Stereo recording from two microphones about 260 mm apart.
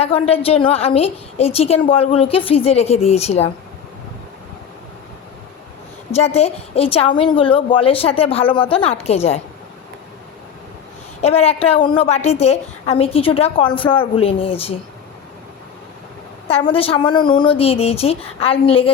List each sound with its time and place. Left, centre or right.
0.0 s a woman's voice: left
6.1 s a woman's voice: left
11.2 s a woman's voice: left
16.5 s a woman's voice: left